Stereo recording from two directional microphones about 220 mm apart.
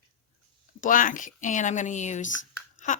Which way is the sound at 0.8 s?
35° left (ahead or behind).